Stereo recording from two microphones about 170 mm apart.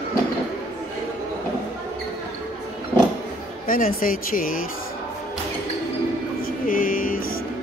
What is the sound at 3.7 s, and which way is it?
Speech, 55° left (ahead or behind).